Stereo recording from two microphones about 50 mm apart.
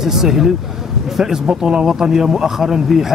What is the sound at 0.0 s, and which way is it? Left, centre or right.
Speech, centre.